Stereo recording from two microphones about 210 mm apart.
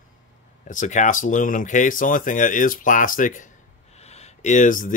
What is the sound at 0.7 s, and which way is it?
Speech, 35° left (ahead or behind).